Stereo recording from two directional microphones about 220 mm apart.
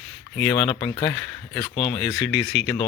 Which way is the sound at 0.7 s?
20° left (ahead or behind).